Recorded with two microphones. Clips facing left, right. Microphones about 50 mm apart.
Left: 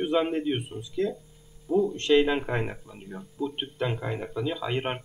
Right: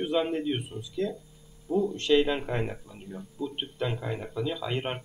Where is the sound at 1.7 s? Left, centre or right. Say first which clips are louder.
Left 3 dB; left.